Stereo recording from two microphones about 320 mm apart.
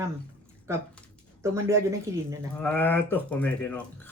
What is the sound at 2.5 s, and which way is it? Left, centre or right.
Speech, centre.